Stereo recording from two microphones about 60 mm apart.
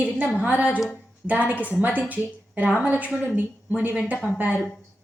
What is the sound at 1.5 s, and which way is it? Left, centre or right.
Speech, left.